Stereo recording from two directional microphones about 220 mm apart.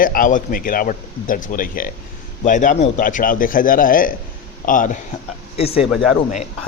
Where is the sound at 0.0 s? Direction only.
40° left (ahead or behind).